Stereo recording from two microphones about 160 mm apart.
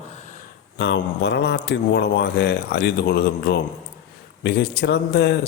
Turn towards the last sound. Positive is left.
turn(degrees=90)